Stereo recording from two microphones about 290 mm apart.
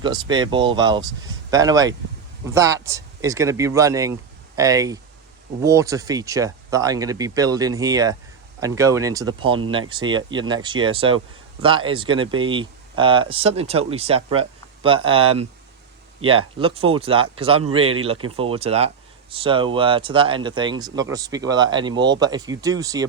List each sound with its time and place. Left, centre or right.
0.0 s speech: centre
16.6 s speech: centre